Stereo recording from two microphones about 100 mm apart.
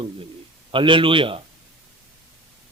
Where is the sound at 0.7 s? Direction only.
55° right (ahead or behind).